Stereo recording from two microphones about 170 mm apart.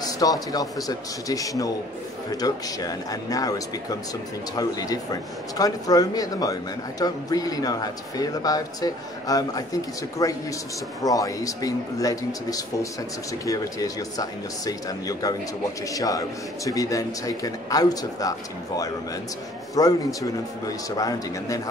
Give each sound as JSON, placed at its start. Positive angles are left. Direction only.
{"t": 0.0, "sound": "speech", "side_deg": 20}
{"t": 19.7, "sound": "speech", "side_deg": 20}